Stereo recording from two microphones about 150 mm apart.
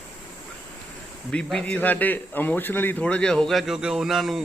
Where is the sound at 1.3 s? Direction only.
5° left (ahead or behind).